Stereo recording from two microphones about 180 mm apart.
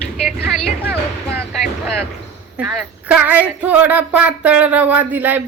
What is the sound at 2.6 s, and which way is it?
Child singing, 5° right (ahead or behind).